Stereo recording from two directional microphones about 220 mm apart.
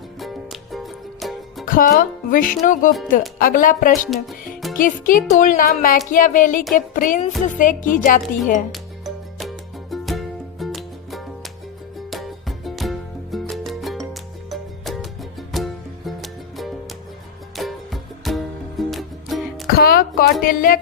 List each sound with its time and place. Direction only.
0.2 s music: centre (ahead or behind)
1.6 s speech: 40° left (ahead or behind)
9.4 s music: centre (ahead or behind)
19.6 s music: 40° left (ahead or behind)
20.4 s speech: 40° left (ahead or behind)